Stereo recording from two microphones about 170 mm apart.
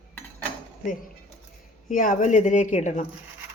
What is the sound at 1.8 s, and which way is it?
A woman's voice, 50° left (ahead or behind).